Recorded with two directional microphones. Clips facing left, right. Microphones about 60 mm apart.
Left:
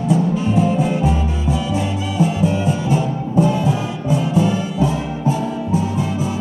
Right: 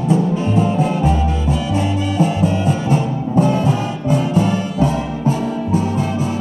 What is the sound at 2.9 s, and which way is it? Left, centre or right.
Music, right.